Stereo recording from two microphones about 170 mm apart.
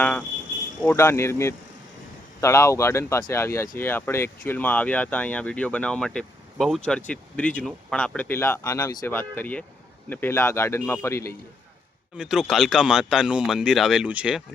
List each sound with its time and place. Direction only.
0.0 s speech: 10° left (ahead or behind)
12.1 s speech: 5° right (ahead or behind)